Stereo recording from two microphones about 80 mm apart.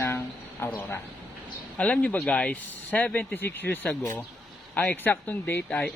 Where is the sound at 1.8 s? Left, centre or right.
Centre.